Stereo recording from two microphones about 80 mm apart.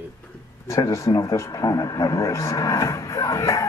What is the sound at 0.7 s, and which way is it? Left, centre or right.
Speech, left.